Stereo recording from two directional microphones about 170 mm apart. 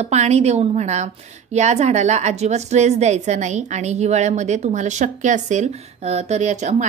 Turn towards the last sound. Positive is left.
turn(degrees=-45)  # may be behind; listen again after turning